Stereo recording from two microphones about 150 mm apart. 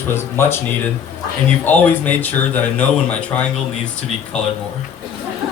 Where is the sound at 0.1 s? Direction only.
15° left (ahead or behind).